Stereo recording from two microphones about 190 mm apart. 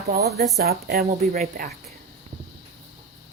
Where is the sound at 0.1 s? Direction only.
55° right (ahead or behind).